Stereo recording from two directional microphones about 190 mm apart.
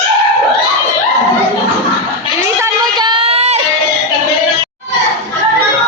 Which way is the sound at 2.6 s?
25° right (ahead or behind).